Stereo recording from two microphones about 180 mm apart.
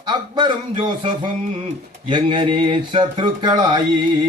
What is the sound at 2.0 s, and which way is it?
Speech, 25° right (ahead or behind).